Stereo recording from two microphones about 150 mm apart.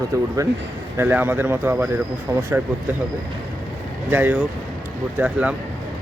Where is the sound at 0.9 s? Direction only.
15° right (ahead or behind).